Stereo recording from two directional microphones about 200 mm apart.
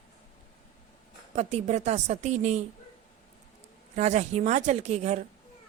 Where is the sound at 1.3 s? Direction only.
35° right (ahead or behind).